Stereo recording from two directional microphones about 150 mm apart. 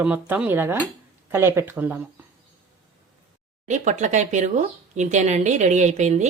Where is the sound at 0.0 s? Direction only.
10° right (ahead or behind).